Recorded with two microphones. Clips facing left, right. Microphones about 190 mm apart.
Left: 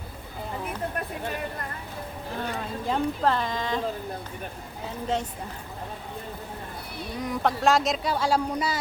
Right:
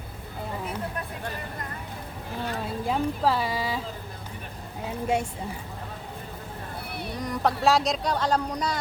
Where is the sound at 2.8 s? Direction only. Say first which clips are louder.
Even; 5° right (ahead or behind).